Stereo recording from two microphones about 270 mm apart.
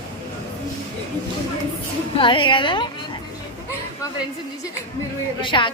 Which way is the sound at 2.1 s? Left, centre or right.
Centre.